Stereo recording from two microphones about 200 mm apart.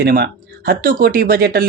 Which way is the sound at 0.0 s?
50° right (ahead or behind).